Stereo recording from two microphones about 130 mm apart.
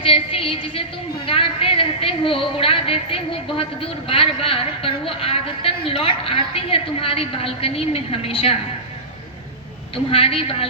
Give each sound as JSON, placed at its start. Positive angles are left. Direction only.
{"t": 0.0, "sound": "a woman's voice", "side_deg": 45}
{"t": 9.9, "sound": "a woman's voice", "side_deg": 45}